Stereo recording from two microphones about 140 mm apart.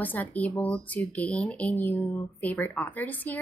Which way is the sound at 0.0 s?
10° left (ahead or behind).